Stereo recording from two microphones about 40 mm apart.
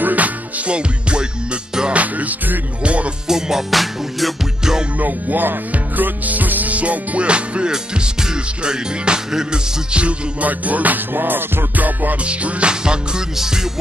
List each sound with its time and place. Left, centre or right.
0.0 s music: right
0.7 s music: right
1.9 s music: right
2.8 s music: right
3.3 s music: centre
3.7 s music: centre
4.9 s music: right; by 9.6 s centre
9.9 s music: right
11.1 s music: right
11.8 s music: right
12.3 s music: right